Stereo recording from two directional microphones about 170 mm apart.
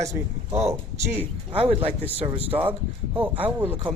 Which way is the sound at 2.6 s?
10° right (ahead or behind).